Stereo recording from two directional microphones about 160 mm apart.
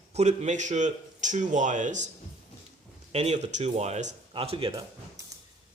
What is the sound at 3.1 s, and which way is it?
A man's voice, 45° right (ahead or behind).